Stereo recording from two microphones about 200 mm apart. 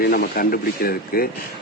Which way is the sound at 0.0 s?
50° left (ahead or behind).